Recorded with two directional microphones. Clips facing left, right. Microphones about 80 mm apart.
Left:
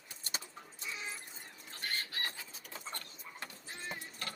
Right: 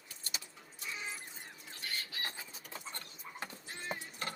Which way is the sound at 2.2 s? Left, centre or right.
Right.